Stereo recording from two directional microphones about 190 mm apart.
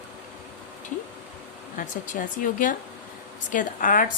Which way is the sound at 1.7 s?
45° left (ahead or behind).